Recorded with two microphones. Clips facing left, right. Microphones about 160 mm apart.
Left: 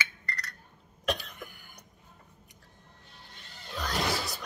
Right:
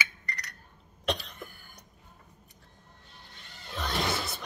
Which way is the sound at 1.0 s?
5° left (ahead or behind).